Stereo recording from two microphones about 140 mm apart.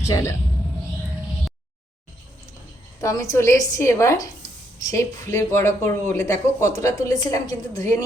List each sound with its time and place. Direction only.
0.0 s speech: 20° left (ahead or behind)
3.0 s speech: 20° left (ahead or behind)